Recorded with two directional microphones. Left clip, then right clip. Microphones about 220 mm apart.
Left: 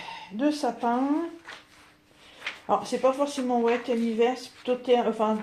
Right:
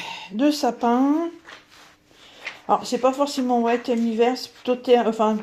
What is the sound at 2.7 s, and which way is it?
Speech, 45° right (ahead or behind).